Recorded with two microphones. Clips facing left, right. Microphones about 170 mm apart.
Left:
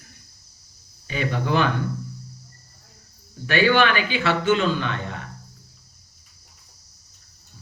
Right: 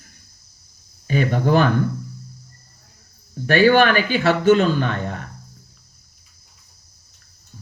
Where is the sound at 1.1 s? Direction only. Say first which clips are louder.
Right 6 dB; 45° right (ahead or behind).